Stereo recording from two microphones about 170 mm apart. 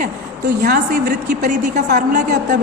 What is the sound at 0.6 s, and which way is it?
A woman's voice, 60° right (ahead or behind).